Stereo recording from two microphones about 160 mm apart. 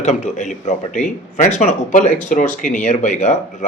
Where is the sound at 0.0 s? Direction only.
50° left (ahead or behind).